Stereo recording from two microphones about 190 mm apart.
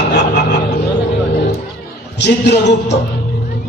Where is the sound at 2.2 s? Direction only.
65° left (ahead or behind).